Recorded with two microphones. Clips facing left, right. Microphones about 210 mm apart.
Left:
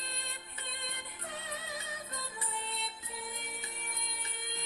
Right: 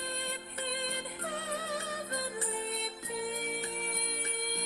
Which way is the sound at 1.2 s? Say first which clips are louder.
Right 5 dB; 75° right (ahead or behind).